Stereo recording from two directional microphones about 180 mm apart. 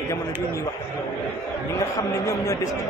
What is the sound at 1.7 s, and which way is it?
Speech, 20° left (ahead or behind).